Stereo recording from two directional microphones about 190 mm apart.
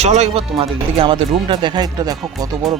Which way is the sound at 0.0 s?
35° right (ahead or behind).